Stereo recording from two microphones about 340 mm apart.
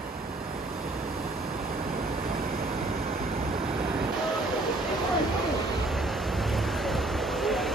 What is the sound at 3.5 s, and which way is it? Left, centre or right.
Vehicle, centre.